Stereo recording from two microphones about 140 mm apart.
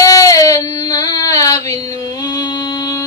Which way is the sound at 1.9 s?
25° left (ahead or behind).